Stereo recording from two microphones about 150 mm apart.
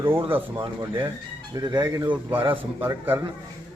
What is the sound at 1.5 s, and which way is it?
Speech, 25° right (ahead or behind).